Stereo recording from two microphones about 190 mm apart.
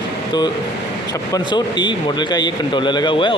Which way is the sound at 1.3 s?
25° left (ahead or behind).